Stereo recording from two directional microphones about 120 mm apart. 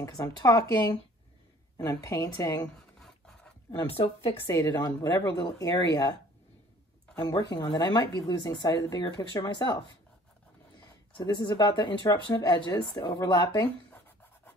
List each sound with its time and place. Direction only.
0.0 s speech: 30° left (ahead or behind)
2.0 s speech: 30° left (ahead or behind)
3.0 s filing: 5° left (ahead or behind)
3.9 s speech: 50° left (ahead or behind)
4.6 s speech: 35° left (ahead or behind)
7.2 s speech: 35° left (ahead or behind)
11.1 s speech: 35° left (ahead or behind)